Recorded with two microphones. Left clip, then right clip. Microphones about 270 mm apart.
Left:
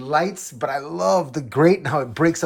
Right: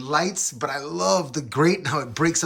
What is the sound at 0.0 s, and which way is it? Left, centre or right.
Speech, centre.